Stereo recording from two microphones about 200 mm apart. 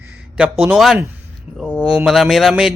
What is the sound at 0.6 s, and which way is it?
A man's voice, 5° right (ahead or behind).